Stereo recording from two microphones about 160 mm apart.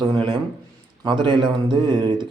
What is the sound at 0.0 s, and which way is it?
A man's voice, 30° right (ahead or behind).